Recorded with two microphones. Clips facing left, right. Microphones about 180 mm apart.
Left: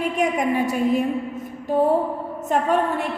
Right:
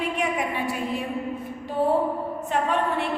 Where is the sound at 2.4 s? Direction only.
45° left (ahead or behind).